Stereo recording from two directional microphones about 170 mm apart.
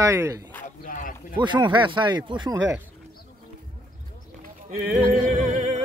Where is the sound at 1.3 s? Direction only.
25° right (ahead or behind).